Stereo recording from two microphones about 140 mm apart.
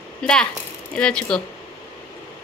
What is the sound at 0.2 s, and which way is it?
Speech, 5° left (ahead or behind).